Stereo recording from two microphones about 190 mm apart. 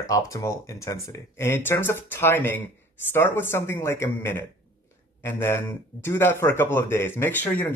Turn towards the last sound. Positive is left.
turn(degrees=10)  # may be behind; listen again after turning